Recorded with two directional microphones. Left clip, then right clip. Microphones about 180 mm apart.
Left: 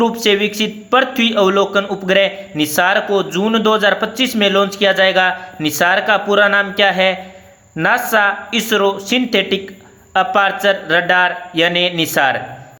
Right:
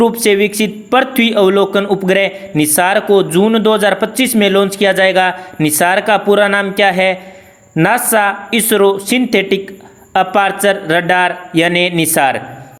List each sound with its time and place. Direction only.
0.0 s speech: 25° right (ahead or behind)